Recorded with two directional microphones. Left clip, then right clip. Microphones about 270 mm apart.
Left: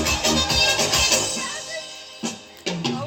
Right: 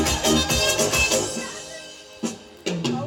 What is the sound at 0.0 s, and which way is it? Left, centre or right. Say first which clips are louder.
Music: even; right.